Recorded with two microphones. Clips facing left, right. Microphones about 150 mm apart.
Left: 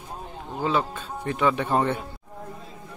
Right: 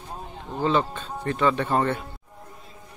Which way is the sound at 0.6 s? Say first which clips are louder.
Right 2 dB; 5° left (ahead or behind).